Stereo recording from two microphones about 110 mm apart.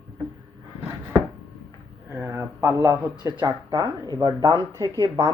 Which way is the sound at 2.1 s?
20° right (ahead or behind).